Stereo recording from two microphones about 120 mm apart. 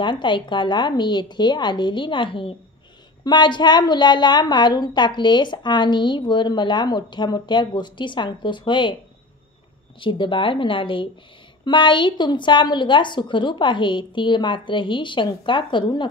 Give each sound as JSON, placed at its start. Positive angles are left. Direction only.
{"t": 0.0, "sound": "a woman's voice", "side_deg": 40}
{"t": 9.9, "sound": "a woman's voice", "side_deg": 45}